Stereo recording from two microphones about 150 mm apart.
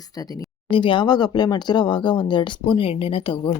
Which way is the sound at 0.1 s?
25° left (ahead or behind).